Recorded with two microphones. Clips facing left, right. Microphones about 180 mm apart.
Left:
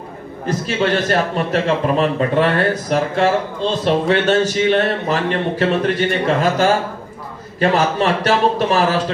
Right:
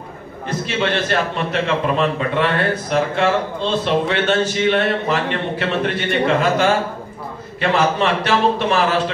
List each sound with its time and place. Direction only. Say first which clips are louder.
0.5 s a man's voice: left 3 dB; 40° left (ahead or behind)